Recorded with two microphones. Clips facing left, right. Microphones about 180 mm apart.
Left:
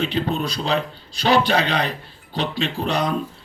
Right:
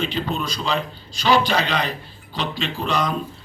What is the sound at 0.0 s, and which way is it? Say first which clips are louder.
Speech: left 2 dB; 60° left (ahead or behind).